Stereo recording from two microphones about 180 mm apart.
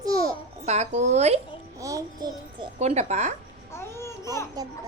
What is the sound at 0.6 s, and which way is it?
Speech, 40° right (ahead or behind).